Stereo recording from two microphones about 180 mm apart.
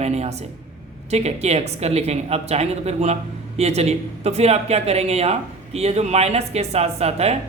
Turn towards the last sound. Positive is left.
turn(degrees=-35)  # may be behind; listen again after turning